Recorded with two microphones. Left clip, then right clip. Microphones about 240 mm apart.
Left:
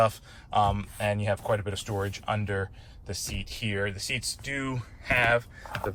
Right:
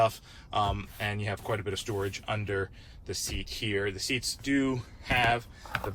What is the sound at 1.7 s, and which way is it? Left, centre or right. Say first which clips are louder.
Speech: even; centre.